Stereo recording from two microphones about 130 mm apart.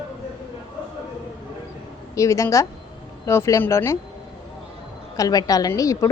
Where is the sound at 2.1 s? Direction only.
25° left (ahead or behind).